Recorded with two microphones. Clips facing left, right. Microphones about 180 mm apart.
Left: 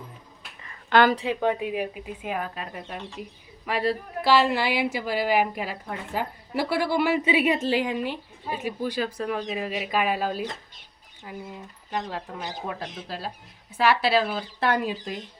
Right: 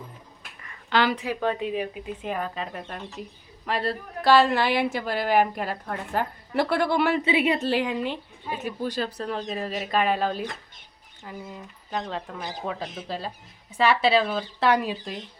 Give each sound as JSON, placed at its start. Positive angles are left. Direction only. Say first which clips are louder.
{"t": 0.9, "sound": "a sound", "louder": "left 4 dB", "side_deg": 50}
{"t": 1.2, "sound": "speech", "louder": "left 2 dB", "side_deg": 20}
{"t": 1.5, "sound": "a woman's voice", "louder": "even", "side_deg": 10}